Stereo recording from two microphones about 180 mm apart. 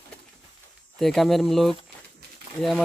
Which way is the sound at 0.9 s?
Centre (ahead or behind).